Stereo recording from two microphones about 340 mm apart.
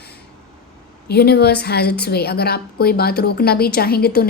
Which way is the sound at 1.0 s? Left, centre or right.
Left.